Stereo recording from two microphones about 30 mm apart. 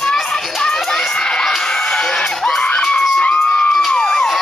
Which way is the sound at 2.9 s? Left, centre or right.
Left.